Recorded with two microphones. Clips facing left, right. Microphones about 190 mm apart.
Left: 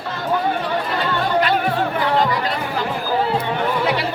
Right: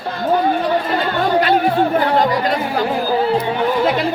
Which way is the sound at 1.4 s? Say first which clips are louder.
Right 4 dB; 45° right (ahead or behind).